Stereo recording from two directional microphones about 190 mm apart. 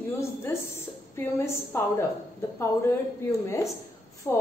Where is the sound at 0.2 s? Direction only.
15° left (ahead or behind).